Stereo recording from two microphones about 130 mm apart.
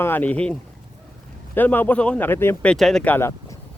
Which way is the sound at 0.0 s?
15° left (ahead or behind).